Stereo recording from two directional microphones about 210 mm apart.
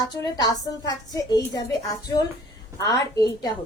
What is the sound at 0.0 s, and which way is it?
A woman's voice, 20° left (ahead or behind).